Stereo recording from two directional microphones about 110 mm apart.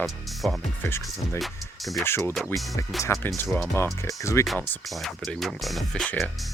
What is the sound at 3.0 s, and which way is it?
Speech, 25° left (ahead or behind).